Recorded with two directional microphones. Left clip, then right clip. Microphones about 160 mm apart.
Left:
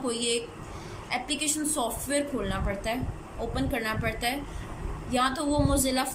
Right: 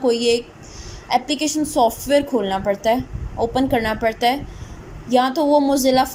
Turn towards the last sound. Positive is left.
turn(degrees=-40)  # may be behind; listen again after turning